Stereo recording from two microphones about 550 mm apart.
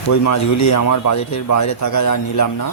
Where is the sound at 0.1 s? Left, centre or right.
Left.